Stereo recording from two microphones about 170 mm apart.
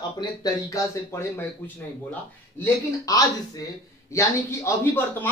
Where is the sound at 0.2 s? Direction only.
20° left (ahead or behind).